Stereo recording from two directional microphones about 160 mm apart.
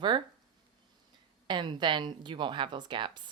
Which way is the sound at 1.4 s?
30° right (ahead or behind).